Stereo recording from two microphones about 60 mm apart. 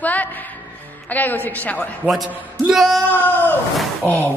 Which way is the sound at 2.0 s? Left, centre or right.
Centre.